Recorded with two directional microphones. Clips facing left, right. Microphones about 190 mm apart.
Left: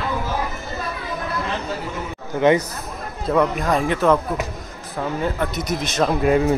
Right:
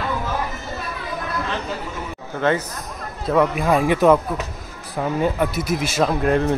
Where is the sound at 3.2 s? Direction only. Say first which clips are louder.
Right 1 dB; 5° right (ahead or behind).